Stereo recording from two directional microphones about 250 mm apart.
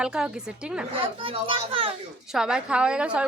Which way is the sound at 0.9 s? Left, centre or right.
Right.